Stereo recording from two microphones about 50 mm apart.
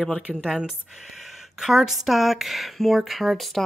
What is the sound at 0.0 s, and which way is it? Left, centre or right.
Speech, centre.